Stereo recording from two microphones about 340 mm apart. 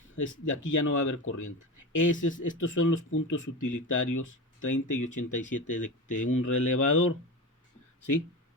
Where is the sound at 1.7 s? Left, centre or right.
Left.